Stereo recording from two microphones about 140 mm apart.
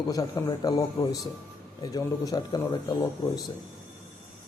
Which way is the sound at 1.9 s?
25° left (ahead or behind).